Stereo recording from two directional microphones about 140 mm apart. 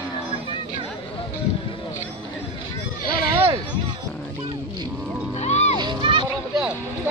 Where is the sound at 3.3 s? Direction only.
40° right (ahead or behind).